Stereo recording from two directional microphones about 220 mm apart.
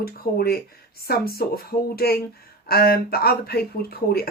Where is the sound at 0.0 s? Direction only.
45° left (ahead or behind).